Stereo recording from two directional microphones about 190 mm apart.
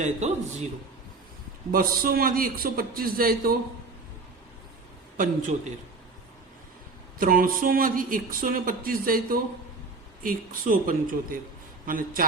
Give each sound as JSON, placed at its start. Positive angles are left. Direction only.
{"t": 0.0, "sound": "speech", "side_deg": -40}
{"t": 1.7, "sound": "speech", "side_deg": -50}
{"t": 5.1, "sound": "speech", "side_deg": -45}
{"t": 7.2, "sound": "speech", "side_deg": -50}